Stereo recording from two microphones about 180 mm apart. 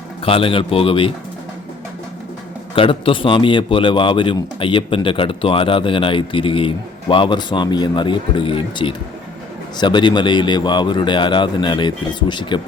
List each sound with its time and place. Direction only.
0.3 s a man's voice: 30° left (ahead or behind)
2.7 s a man's voice: 30° left (ahead or behind)